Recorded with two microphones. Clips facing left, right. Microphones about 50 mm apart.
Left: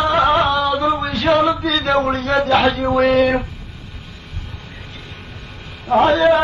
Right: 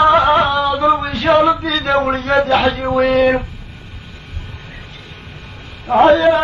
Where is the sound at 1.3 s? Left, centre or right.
Centre.